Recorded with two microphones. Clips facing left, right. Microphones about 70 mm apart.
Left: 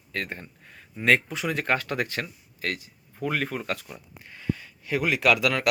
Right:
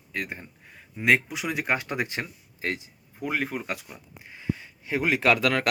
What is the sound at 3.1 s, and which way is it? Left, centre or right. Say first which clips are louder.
Speech: left 1 dB; centre.